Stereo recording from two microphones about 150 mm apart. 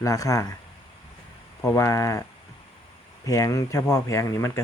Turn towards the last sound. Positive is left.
turn(degrees=20)  # may be behind; listen again after turning